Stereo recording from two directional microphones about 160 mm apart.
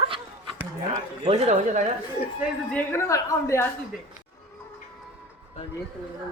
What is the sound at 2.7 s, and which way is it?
Speech, 15° left (ahead or behind).